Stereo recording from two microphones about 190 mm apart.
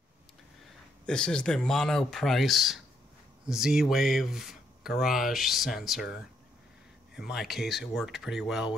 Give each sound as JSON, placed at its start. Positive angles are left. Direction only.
{"t": 1.0, "sound": "speech", "side_deg": 5}
{"t": 7.2, "sound": "speech", "side_deg": -5}